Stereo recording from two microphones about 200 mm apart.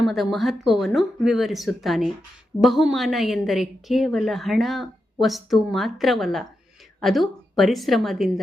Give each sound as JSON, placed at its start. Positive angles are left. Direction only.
{"t": 0.0, "sound": "a woman's voice", "side_deg": 0}